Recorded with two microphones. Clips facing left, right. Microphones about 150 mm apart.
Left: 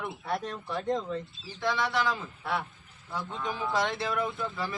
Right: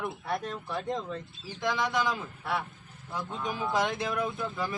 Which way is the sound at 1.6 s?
15° right (ahead or behind).